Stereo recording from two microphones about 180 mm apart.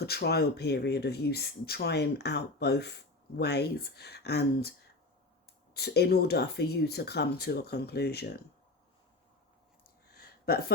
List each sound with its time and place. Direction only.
0.0 s speech: 65° left (ahead or behind)
5.7 s speech: 65° left (ahead or behind)
10.2 s a sound: 60° left (ahead or behind)